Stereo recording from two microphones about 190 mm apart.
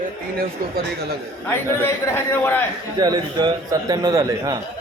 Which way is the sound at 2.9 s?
20° right (ahead or behind).